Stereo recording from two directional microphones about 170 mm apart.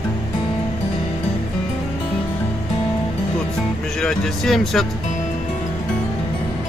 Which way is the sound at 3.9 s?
5° left (ahead or behind).